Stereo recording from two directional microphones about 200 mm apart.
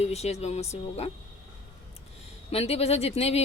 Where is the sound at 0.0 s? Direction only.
30° left (ahead or behind).